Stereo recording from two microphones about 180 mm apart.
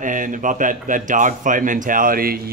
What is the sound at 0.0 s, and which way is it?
Speech, 45° right (ahead or behind).